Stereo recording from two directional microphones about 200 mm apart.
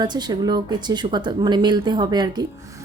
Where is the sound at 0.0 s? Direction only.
20° right (ahead or behind).